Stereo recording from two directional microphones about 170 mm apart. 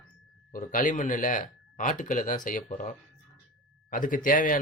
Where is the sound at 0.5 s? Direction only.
50° left (ahead or behind).